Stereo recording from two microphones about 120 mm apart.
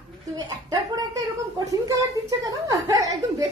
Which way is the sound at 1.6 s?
30° right (ahead or behind).